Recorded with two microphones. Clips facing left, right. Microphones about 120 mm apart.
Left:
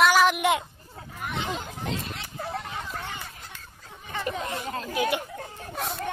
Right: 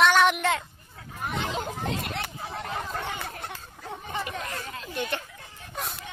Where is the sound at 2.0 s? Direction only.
60° right (ahead or behind).